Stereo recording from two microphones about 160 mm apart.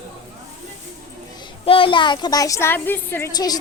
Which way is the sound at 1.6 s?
35° left (ahead or behind).